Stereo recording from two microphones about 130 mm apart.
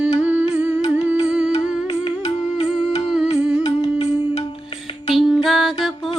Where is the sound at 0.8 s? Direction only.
55° left (ahead or behind).